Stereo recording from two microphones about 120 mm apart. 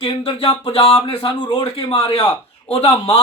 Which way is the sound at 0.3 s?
55° left (ahead or behind).